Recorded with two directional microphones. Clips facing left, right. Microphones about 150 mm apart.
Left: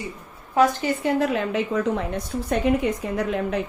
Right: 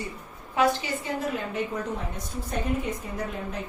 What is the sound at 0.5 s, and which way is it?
Speech, 40° left (ahead or behind).